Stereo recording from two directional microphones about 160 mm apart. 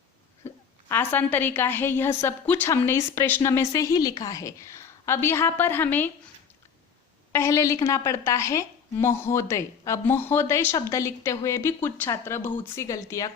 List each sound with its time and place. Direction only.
0.4 s a woman's voice: 15° left (ahead or behind)
7.3 s a woman's voice: 20° left (ahead or behind)